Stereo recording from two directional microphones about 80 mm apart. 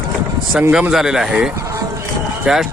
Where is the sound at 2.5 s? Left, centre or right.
Centre.